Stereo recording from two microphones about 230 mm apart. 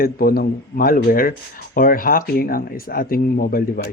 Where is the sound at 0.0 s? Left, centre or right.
Left.